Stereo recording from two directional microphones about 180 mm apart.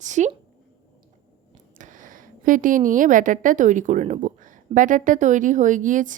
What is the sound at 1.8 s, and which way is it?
A woman's voice, 45° right (ahead or behind).